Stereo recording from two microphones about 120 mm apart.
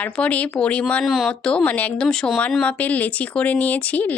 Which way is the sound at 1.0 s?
Centre (ahead or behind).